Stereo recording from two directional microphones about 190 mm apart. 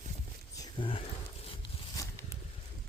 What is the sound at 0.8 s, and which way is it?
Speech, 25° left (ahead or behind).